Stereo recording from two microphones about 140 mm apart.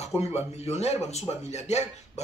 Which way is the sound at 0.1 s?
15° right (ahead or behind).